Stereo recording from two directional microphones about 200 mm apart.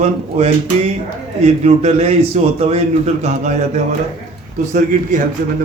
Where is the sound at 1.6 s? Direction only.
35° right (ahead or behind).